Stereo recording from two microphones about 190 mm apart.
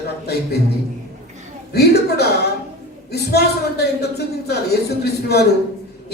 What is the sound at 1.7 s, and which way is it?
Speech, 60° left (ahead or behind).